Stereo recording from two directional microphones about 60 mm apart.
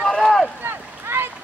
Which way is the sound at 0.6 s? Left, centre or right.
Right.